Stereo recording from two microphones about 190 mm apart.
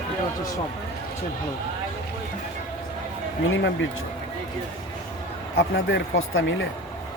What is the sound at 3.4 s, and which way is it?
Speech, 85° left.